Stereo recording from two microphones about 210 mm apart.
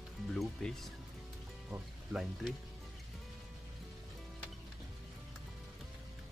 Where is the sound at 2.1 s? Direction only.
Centre (ahead or behind).